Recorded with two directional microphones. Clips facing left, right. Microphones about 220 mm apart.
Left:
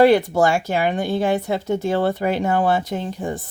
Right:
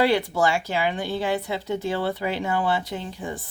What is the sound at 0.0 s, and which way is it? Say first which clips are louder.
A woman's voice: left 7 dB; 45° left (ahead or behind).